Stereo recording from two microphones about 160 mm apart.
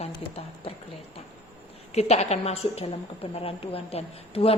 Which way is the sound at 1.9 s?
40° left (ahead or behind).